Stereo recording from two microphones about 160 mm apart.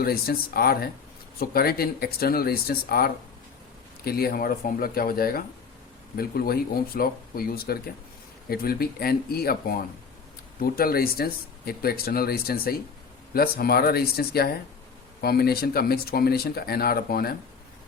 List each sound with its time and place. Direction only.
0.0 s speech: 70° left (ahead or behind)